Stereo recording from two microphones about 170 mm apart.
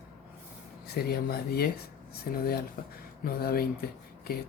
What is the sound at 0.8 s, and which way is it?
Speech, 65° left (ahead or behind).